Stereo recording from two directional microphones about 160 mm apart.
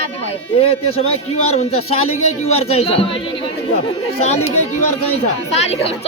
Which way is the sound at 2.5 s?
40° left (ahead or behind).